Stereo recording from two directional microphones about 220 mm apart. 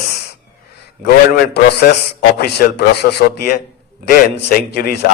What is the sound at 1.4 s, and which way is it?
A man's voice, 45° left (ahead or behind).